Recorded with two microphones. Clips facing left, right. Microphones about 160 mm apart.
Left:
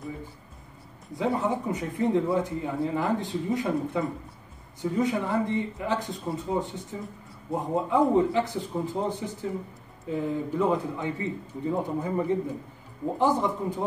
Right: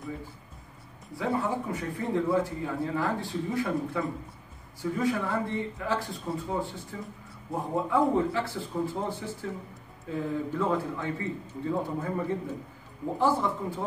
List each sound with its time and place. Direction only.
1.1 s a man's voice: 20° left (ahead or behind)